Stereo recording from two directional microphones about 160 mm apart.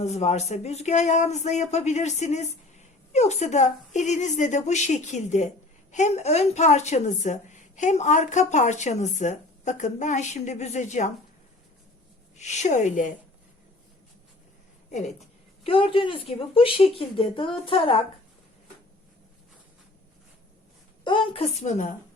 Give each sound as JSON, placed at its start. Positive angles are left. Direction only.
{"t": 0.0, "sound": "speech", "side_deg": 45}
{"t": 12.4, "sound": "speech", "side_deg": 50}
{"t": 14.8, "sound": "a sound", "side_deg": 45}
{"t": 15.6, "sound": "speech", "side_deg": 35}
{"t": 21.0, "sound": "a woman's voice", "side_deg": 30}
{"t": 21.6, "sound": "speech", "side_deg": 50}